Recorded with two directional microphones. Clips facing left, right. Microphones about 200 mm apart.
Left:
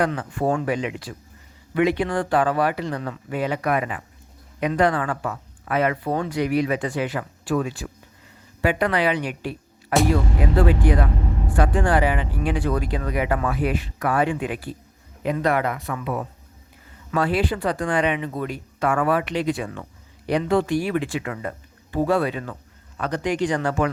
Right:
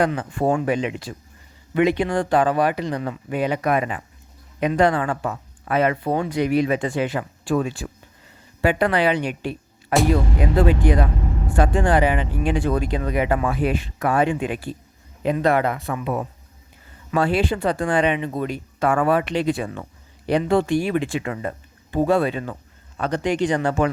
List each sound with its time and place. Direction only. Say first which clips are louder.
0.2 s speech: right 2 dB; 25° right (ahead or behind)